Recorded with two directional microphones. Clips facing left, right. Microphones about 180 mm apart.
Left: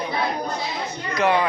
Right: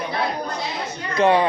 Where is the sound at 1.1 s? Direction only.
25° right (ahead or behind).